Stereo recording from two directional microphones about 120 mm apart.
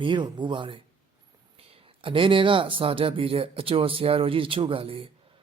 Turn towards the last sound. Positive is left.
turn(degrees=-50)  # may be behind; listen again after turning